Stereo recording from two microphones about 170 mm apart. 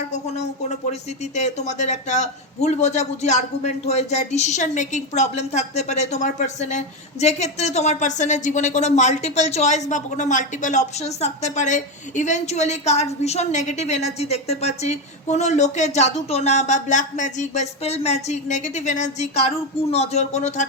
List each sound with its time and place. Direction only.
1.4 s a man's voice: 40° left (ahead or behind)